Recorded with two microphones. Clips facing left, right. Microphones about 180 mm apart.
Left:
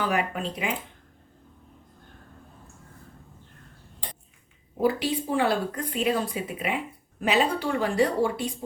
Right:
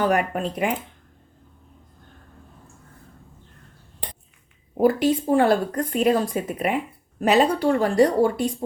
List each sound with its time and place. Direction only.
0.0 s speech: 45° right (ahead or behind)
4.8 s a woman's voice: 50° right (ahead or behind)